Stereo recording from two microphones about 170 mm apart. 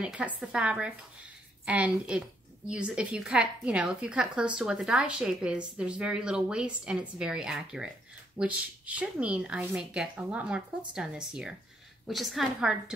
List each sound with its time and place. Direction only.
0.0 s a woman's voice: 5° right (ahead or behind)